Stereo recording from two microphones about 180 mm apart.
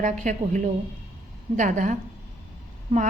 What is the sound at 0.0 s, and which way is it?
A woman's voice, 45° right (ahead or behind).